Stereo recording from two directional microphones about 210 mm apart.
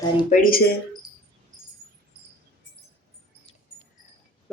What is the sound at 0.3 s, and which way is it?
Speech, 40° left (ahead or behind).